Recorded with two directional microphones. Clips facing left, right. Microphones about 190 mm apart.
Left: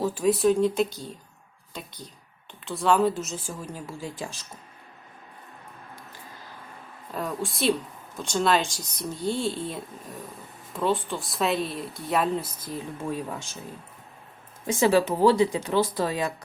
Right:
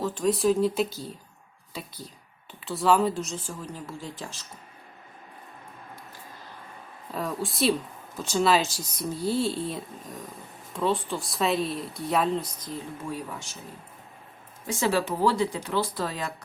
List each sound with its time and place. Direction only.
0.0 s a woman's voice: 10° left (ahead or behind)
7.1 s a woman's voice: centre (ahead or behind)
14.7 s speech: 15° left (ahead or behind)